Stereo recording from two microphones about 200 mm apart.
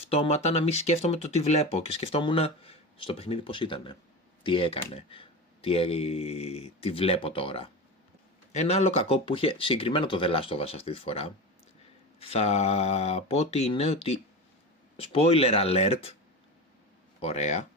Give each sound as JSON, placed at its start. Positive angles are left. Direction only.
{"t": 0.0, "sound": "speech", "side_deg": 30}
{"t": 17.2, "sound": "speech", "side_deg": 30}